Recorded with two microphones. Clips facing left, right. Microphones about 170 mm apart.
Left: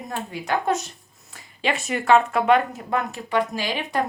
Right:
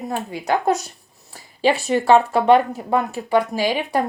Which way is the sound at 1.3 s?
35° right (ahead or behind).